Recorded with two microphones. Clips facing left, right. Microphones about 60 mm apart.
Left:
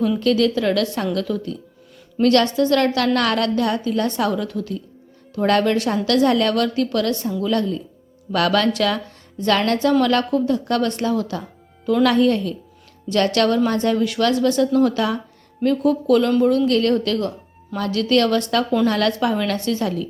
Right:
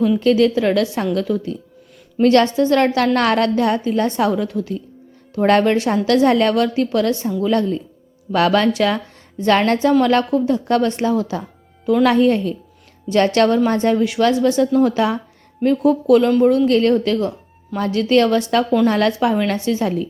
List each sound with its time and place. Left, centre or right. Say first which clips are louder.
0.2 s a woman's voice: right 3 dB; right